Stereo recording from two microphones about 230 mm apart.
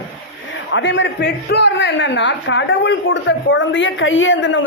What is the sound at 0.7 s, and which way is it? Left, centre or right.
A man's voice, left.